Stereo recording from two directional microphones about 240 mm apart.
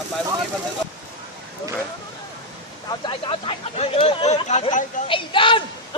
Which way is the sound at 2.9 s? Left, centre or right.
Centre.